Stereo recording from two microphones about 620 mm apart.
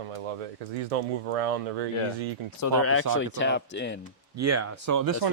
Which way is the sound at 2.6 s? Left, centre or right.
Left.